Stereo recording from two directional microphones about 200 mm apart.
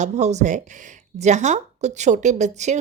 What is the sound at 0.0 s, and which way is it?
A woman's voice, 35° right (ahead or behind).